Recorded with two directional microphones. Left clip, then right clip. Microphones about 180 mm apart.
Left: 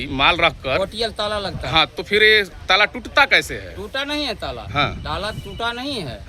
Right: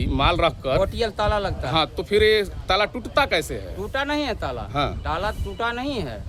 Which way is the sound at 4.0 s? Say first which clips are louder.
Left 1 dB; 25° right (ahead or behind).